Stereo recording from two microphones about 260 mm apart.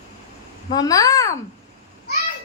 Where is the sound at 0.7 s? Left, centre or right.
Centre.